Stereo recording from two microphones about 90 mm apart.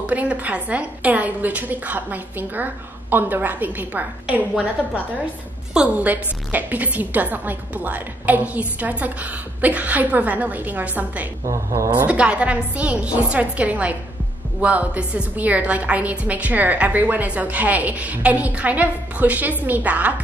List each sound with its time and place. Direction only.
0.0 s a woman's voice: 15° right (ahead or behind)
11.4 s speech: 35° right (ahead or behind)
12.0 s a woman's voice: 15° right (ahead or behind)